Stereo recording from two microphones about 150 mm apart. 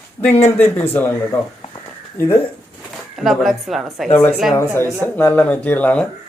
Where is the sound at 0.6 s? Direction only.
15° left (ahead or behind).